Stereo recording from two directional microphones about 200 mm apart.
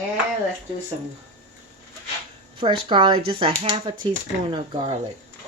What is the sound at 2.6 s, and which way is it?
Speech, 25° right (ahead or behind).